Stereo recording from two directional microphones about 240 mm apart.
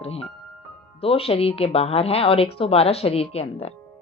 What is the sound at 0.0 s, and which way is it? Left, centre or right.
A woman's voice, left.